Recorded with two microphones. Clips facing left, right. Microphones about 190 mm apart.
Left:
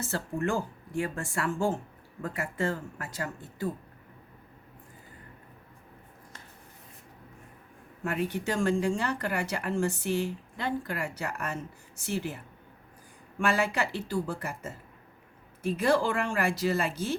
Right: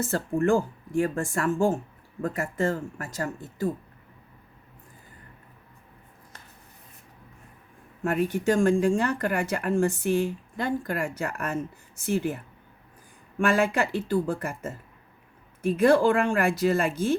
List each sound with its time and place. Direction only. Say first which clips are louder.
0.0 s speech: right 6 dB; 50° right (ahead or behind)
8.0 s speech: right 6 dB; 45° right (ahead or behind)
13.4 s speech: right 5 dB; 50° right (ahead or behind)